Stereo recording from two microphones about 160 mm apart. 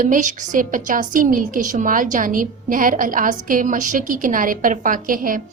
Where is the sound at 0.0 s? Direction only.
55° right (ahead or behind).